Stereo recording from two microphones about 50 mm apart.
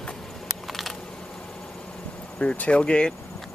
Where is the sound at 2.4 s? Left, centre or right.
Left.